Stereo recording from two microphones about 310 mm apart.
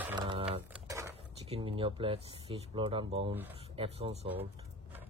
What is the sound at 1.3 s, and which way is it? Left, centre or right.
Speech, centre.